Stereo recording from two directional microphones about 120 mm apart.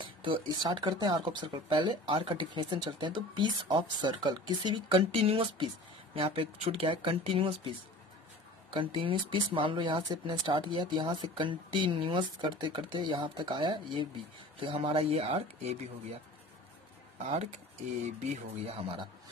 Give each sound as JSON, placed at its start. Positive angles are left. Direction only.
{"t": 0.0, "sound": "speech", "side_deg": -45}
{"t": 8.7, "sound": "speech", "side_deg": -45}
{"t": 17.2, "sound": "speech", "side_deg": -70}
{"t": 18.8, "sound": "speech", "side_deg": -50}